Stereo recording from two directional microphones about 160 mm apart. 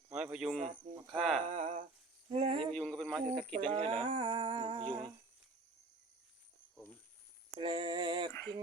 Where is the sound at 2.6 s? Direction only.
5° left (ahead or behind).